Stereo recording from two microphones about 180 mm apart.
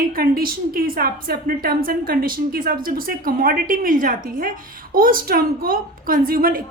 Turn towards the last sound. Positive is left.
turn(degrees=-55)  # may be behind; listen again after turning